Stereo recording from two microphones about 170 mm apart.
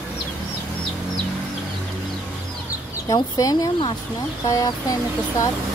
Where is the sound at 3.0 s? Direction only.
20° left (ahead or behind).